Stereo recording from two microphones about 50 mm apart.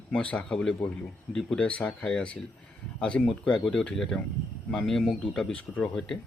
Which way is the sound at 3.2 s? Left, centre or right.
Centre.